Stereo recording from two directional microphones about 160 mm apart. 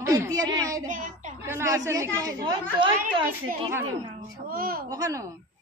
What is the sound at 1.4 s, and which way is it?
A woman's voice, 15° right (ahead or behind).